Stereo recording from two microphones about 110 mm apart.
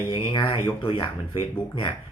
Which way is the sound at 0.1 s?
50° left (ahead or behind).